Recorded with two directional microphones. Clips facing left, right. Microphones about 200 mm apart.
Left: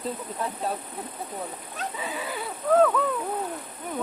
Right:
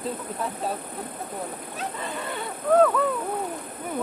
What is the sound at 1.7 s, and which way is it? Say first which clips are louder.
Speech: even; centre (ahead or behind).